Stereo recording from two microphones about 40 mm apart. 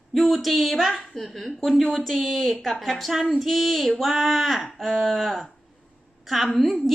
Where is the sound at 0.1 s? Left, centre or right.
Centre.